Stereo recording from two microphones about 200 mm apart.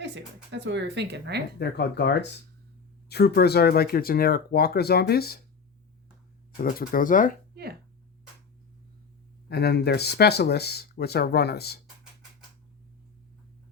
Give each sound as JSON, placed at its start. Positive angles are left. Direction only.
{"t": 0.5, "sound": "speech", "side_deg": -60}
{"t": 1.5, "sound": "speech", "side_deg": 55}
{"t": 6.6, "sound": "speech", "side_deg": 45}
{"t": 9.5, "sound": "speech", "side_deg": 55}